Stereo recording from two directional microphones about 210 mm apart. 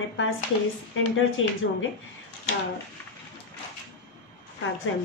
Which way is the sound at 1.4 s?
70° left (ahead or behind).